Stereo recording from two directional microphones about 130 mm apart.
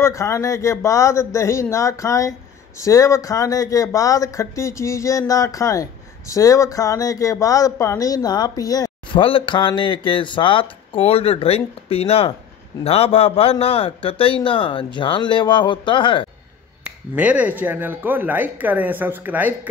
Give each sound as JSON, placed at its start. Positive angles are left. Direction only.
{"t": 0.0, "sound": "speech", "side_deg": 25}
{"t": 9.2, "sound": "a man's voice", "side_deg": 40}
{"t": 17.1, "sound": "speech", "side_deg": -10}